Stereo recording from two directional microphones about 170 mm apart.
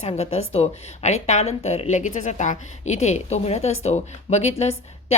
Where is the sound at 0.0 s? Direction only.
40° left (ahead or behind).